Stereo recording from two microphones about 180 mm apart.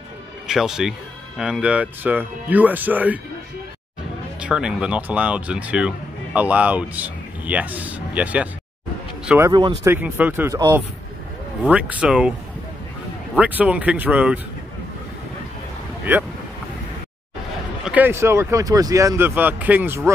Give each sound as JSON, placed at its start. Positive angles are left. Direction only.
{"t": 0.5, "sound": "speech", "side_deg": -5}
{"t": 4.4, "sound": "speech", "side_deg": -5}
{"t": 9.5, "sound": "speech", "side_deg": -25}
{"t": 9.8, "sound": "speech", "side_deg": -10}
{"t": 11.6, "sound": "speech", "side_deg": -5}
{"t": 13.4, "sound": "speech", "side_deg": -10}
{"t": 17.8, "sound": "speech", "side_deg": -10}